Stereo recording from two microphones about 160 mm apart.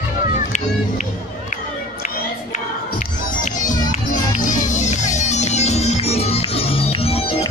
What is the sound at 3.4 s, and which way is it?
Music, 50° left (ahead or behind).